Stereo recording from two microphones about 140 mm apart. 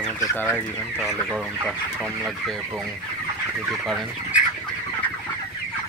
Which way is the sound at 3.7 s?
Centre (ahead or behind).